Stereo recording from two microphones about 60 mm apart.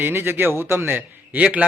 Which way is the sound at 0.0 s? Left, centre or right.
Right.